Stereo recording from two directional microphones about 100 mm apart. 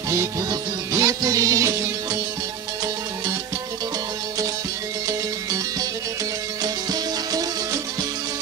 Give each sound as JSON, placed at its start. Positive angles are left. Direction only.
{"t": 0.1, "sound": "music", "side_deg": -35}
{"t": 6.6, "sound": "music", "side_deg": -40}